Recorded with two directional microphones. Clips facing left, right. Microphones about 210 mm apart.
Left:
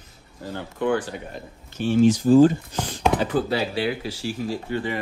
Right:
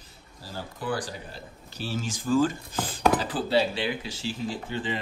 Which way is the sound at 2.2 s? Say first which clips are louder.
Left 7 dB; 45° left (ahead or behind).